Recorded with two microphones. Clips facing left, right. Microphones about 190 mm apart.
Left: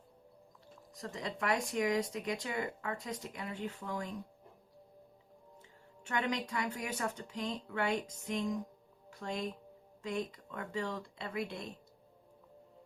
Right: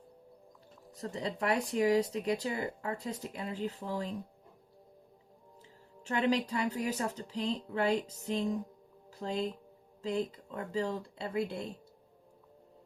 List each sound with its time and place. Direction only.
0.9 s speech: 30° right (ahead or behind)
6.1 s speech: 30° right (ahead or behind)